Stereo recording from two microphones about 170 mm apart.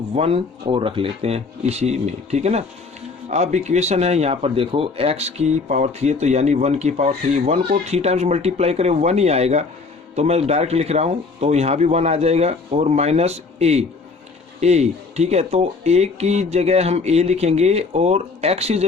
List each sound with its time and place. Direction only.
0.1 s speech: 35° right (ahead or behind)